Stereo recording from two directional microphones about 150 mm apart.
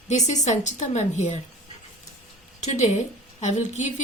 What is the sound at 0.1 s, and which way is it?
A woman's voice, 50° left (ahead or behind).